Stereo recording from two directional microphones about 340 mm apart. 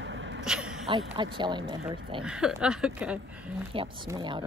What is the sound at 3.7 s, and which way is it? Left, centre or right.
Speech, centre.